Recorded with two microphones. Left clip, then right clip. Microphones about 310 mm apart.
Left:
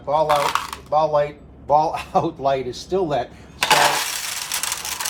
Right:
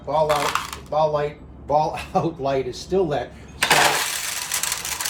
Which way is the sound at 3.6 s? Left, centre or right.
Centre.